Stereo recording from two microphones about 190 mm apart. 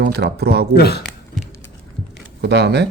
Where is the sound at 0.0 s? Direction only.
60° right (ahead or behind).